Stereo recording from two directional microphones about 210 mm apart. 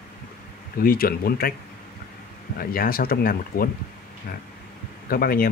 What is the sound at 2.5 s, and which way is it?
Speech, 45° left (ahead or behind).